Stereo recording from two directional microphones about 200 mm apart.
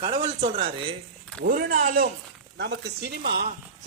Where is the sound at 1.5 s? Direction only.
45° right (ahead or behind).